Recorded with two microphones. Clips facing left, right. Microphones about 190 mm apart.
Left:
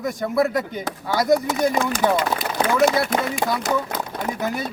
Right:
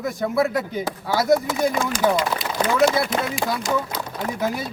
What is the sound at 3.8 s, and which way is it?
Speech, 65° left (ahead or behind).